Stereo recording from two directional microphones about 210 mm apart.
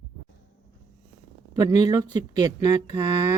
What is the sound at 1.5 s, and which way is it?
Speech, 20° right (ahead or behind).